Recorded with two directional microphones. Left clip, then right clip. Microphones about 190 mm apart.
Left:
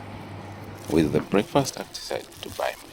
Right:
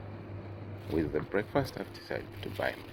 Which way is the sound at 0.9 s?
20° left (ahead or behind).